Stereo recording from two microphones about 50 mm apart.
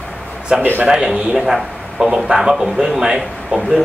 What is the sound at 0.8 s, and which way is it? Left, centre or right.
A man's voice, centre.